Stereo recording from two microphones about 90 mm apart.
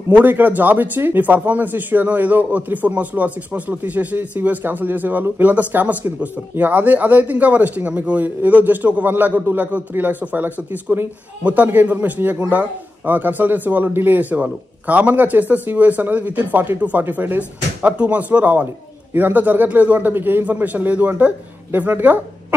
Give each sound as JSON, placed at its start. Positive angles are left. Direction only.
{"t": 0.1, "sound": "speech", "side_deg": -20}